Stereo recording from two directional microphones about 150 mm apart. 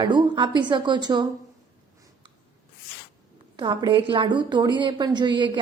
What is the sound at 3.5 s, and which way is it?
A woman's voice, 30° right (ahead or behind).